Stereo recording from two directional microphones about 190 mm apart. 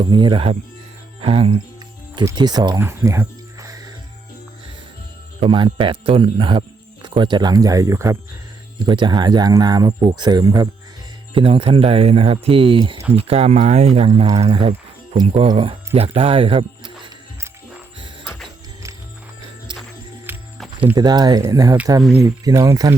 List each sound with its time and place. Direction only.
0.0 s speech: 25° right (ahead or behind)
5.4 s speech: 25° right (ahead or behind)
18.4 s music: 15° right (ahead or behind)
20.6 s music: 5° right (ahead or behind)
20.9 s speech: 20° right (ahead or behind)